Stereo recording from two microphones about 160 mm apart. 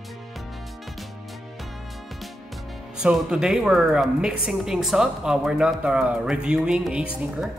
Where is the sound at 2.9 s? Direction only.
5° right (ahead or behind).